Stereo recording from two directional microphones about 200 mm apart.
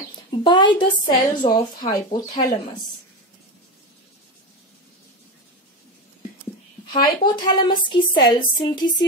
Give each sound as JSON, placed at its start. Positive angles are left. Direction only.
{"t": 0.4, "sound": "a woman's voice", "side_deg": 25}
{"t": 6.9, "sound": "a woman's voice", "side_deg": 25}